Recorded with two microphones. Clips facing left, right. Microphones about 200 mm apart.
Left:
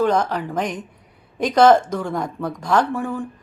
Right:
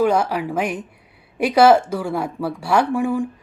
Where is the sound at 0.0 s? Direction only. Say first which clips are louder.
Right 1 dB; 10° right (ahead or behind).